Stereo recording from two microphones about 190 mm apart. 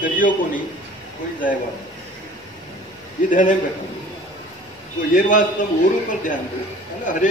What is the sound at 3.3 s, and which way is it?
Speech, 45° left (ahead or behind).